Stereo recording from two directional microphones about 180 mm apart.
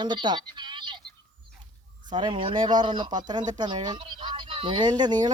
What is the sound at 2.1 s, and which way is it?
Speech, 25° right (ahead or behind).